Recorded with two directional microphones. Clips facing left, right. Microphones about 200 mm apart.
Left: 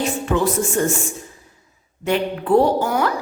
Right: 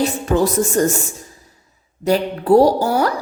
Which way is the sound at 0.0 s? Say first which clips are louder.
Right 3 dB; 40° right (ahead or behind).